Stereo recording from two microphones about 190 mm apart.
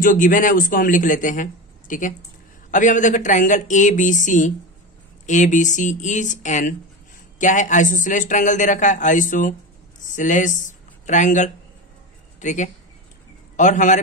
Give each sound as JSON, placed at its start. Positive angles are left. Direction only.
{"t": 0.0, "sound": "a man's voice", "side_deg": 45}